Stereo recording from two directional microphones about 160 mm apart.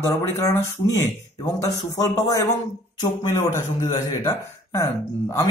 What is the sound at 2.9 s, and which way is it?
Speech, 20° left (ahead or behind).